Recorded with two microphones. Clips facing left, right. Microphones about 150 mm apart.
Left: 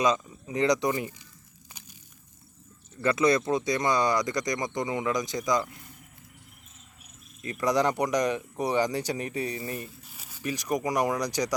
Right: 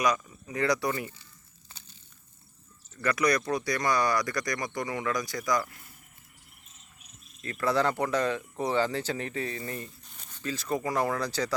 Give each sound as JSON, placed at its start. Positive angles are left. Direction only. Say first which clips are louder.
{"t": 0.0, "sound": "speech", "louder": "left 2 dB", "side_deg": 20}
{"t": 1.7, "sound": "crushing", "louder": "left 5 dB", "side_deg": 15}
{"t": 3.0, "sound": "speech", "louder": "left 3 dB", "side_deg": 25}
{"t": 7.4, "sound": "speech", "louder": "left 2 dB", "side_deg": 15}